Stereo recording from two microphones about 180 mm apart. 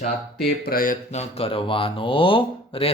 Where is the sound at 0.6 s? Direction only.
50° left (ahead or behind).